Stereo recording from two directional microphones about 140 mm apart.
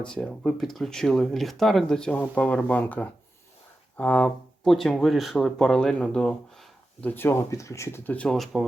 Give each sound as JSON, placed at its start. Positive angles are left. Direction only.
{"t": 0.0, "sound": "speech", "side_deg": 5}
{"t": 7.1, "sound": "speech", "side_deg": 15}